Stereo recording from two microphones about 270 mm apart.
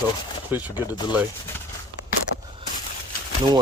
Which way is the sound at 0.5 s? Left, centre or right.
Centre.